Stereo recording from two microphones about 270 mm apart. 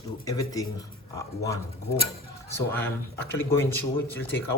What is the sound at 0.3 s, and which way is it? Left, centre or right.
Speech, centre.